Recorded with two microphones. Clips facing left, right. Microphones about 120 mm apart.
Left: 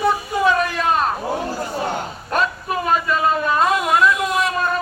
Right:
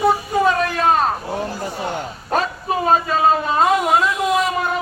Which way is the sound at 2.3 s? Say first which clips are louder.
Right 1 dB; 30° right (ahead or behind).